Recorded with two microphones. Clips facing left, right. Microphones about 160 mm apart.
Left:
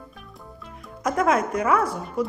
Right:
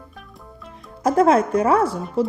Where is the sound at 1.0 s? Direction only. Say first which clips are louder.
Right 6 dB; 30° right (ahead or behind).